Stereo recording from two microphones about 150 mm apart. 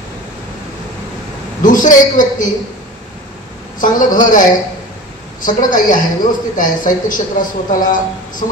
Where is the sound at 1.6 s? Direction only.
60° left (ahead or behind).